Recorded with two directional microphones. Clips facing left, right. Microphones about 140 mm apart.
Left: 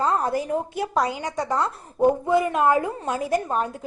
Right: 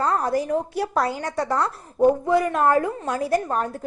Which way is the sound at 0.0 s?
15° left (ahead or behind).